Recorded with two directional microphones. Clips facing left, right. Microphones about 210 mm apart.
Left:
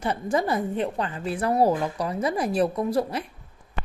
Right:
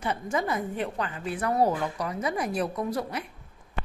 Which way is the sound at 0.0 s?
35° left (ahead or behind).